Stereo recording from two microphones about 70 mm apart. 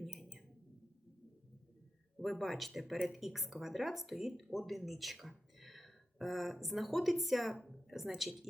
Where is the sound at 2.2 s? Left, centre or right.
Centre.